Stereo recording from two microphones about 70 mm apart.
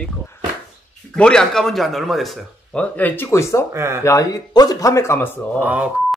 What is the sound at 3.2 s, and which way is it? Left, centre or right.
Speech, left.